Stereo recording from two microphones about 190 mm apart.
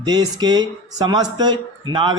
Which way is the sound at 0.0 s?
20° right (ahead or behind).